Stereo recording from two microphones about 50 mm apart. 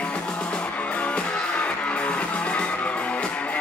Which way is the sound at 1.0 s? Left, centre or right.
Left.